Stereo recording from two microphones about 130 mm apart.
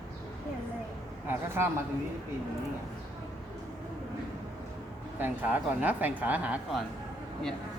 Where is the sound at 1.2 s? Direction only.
20° right (ahead or behind).